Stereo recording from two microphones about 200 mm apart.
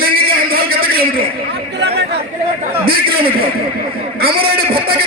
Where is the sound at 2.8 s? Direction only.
50° right (ahead or behind).